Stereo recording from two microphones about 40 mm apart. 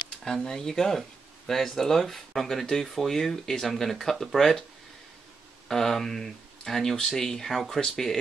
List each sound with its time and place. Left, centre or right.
0.4 s speech: centre
5.7 s speech: centre